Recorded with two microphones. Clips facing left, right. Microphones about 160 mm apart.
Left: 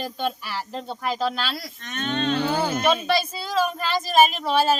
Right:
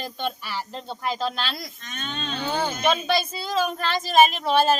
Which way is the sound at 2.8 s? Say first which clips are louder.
Right 1 dB; 5° left (ahead or behind).